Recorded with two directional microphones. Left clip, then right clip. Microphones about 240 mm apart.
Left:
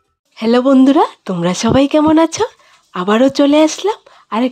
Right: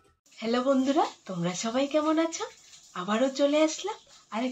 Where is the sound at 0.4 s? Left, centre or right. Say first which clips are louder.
Left 15 dB; left.